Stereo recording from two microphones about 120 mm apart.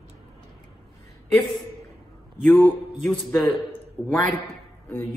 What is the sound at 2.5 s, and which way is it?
A man's voice, 10° left (ahead or behind).